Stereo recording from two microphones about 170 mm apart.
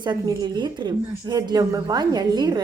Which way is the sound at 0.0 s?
25° right (ahead or behind).